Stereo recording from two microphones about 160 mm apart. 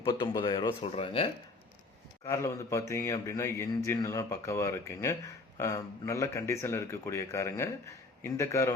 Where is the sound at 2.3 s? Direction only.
20° left (ahead or behind).